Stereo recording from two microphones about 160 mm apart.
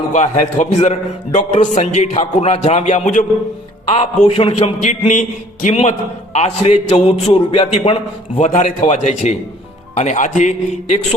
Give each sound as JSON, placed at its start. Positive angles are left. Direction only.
{"t": 0.1, "sound": "a man's voice", "side_deg": 50}
{"t": 8.4, "sound": "a man's voice", "side_deg": 50}